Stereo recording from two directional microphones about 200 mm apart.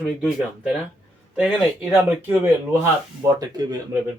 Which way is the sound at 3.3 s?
20° right (ahead or behind).